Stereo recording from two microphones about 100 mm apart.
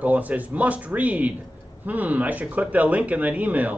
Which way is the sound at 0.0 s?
15° right (ahead or behind).